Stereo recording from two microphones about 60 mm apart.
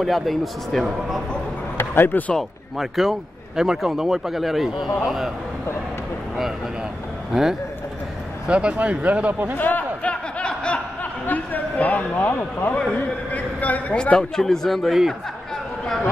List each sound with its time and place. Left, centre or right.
0.0 s speech: centre
1.8 s speech: left
2.8 s speech: centre
7.3 s speech: centre
8.5 s speech: centre
9.6 s a man's voice: left
10.4 s snicker: centre
11.0 s a man's voice: left
14.1 s speech: centre